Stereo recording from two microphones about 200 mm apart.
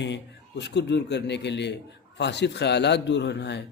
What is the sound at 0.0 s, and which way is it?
A man's voice, 60° left (ahead or behind).